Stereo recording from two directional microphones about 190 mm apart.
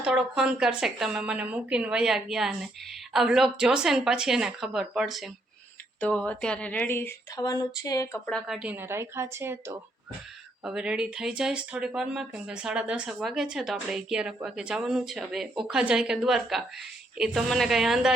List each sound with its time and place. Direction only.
0.0 s speech: 5° right (ahead or behind); by 8.2 s 20° left (ahead or behind)
8.3 s a woman's voice: centre (ahead or behind)